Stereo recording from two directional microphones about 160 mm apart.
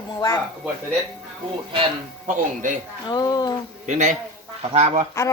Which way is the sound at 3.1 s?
25° left (ahead or behind).